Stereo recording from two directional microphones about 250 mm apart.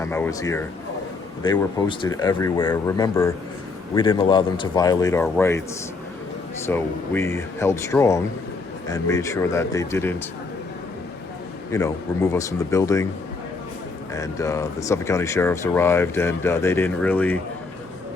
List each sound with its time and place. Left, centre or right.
0.0 s speech: centre
6.7 s speech: centre
11.7 s speech: centre
14.1 s speech: centre